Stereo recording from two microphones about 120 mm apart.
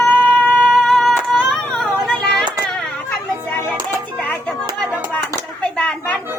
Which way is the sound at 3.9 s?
15° left (ahead or behind).